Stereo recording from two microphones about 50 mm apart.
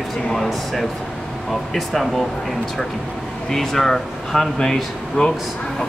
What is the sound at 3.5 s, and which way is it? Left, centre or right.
Speech, centre.